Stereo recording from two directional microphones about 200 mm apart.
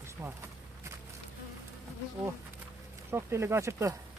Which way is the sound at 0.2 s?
10° right (ahead or behind).